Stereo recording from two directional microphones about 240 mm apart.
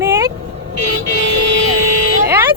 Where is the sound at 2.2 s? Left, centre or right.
Centre.